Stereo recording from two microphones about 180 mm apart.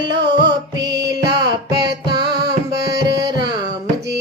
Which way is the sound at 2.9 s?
20° right (ahead or behind).